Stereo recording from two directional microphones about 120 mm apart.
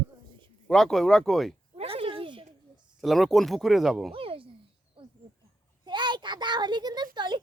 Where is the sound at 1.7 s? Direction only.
55° right (ahead or behind).